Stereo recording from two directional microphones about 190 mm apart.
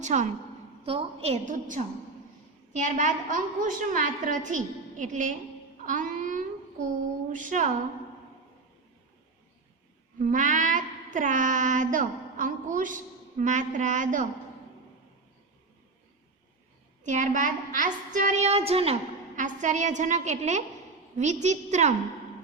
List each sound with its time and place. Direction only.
0.0 s a woman's voice: 40° right (ahead or behind)
5.8 s a sound: 45° right (ahead or behind)
6.8 s child singing: 40° right (ahead or behind)
10.2 s child singing: 45° right (ahead or behind)
17.0 s a woman's voice: 40° right (ahead or behind)